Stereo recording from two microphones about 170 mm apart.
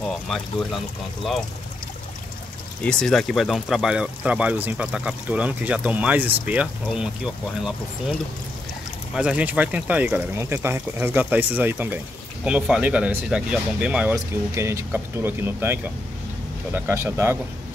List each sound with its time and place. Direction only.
0.3 s speech: centre (ahead or behind)
2.8 s speech: 5° left (ahead or behind)
9.1 s speech: 5° right (ahead or behind)